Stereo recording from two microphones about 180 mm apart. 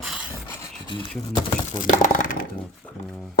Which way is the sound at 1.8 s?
50° left (ahead or behind).